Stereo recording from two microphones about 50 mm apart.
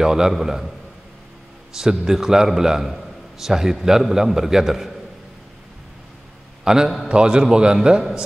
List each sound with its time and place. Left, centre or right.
0.0 s a man's voice: centre
1.8 s a man's voice: centre
6.6 s a man's voice: centre